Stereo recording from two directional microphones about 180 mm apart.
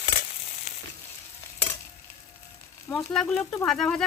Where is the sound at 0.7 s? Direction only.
40° left (ahead or behind).